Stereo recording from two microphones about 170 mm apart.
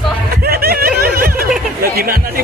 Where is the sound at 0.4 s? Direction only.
65° right (ahead or behind).